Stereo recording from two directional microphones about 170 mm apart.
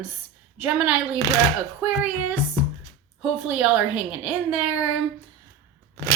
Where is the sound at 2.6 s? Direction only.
15° left (ahead or behind).